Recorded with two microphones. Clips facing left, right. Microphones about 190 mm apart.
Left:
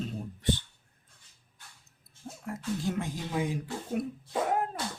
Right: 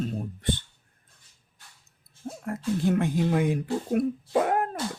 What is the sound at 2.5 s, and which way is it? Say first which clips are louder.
Speech: right 7 dB; 55° right (ahead or behind).